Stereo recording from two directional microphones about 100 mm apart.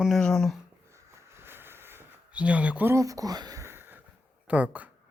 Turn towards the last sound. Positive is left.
turn(degrees=-15)  # may be behind; listen again after turning